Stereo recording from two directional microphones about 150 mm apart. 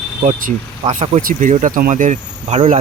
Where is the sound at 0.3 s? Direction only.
60° right (ahead or behind).